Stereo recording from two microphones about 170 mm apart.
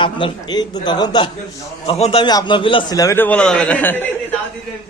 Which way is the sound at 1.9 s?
35° left (ahead or behind).